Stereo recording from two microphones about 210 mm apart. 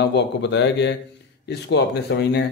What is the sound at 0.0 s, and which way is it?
A man's voice, 55° left (ahead or behind).